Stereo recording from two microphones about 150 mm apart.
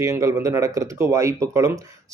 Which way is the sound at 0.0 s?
20° right (ahead or behind).